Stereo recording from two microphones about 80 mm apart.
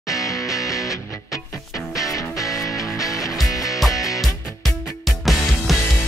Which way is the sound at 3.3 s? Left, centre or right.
Centre.